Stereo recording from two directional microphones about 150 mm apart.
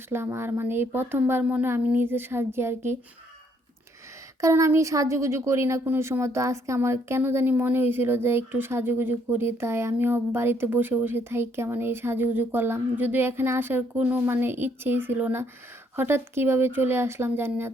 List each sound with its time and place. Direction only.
0.1 s speech: 15° right (ahead or behind)
4.4 s speech: 20° right (ahead or behind)